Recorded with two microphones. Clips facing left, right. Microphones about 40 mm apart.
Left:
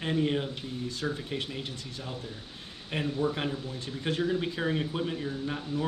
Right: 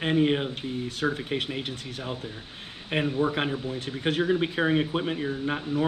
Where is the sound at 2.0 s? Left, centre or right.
Right.